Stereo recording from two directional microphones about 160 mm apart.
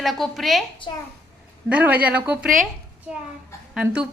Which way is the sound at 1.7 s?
10° right (ahead or behind).